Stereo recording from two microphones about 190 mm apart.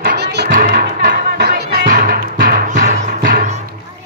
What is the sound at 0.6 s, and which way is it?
Music, 45° right (ahead or behind).